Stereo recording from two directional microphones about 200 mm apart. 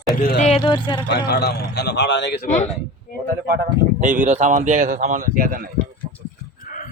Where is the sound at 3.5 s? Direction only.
40° right (ahead or behind).